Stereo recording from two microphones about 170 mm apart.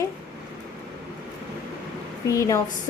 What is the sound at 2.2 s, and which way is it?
Speech, 20° left (ahead or behind).